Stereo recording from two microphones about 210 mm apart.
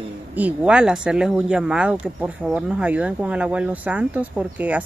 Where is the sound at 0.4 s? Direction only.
5° right (ahead or behind).